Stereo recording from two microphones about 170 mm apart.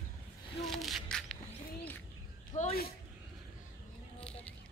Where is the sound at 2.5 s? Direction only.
45° left (ahead or behind).